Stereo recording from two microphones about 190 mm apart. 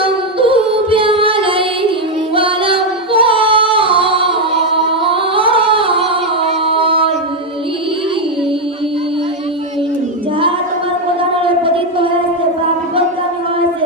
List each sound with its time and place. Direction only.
0.0 s music: 25° right (ahead or behind)
2.3 s female singing: 25° right (ahead or behind)
5.1 s music: 25° right (ahead or behind)
11.4 s a sound: 30° right (ahead or behind)